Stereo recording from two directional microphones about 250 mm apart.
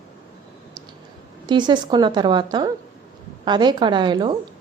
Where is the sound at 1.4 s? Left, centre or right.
Centre.